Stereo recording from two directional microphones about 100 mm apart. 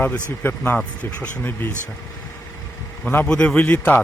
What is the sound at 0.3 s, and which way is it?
Speech, 20° left (ahead or behind).